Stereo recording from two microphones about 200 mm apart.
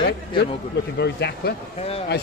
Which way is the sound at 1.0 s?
55° left (ahead or behind).